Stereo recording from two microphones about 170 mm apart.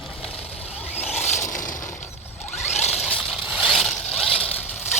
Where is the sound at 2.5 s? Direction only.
40° left (ahead or behind).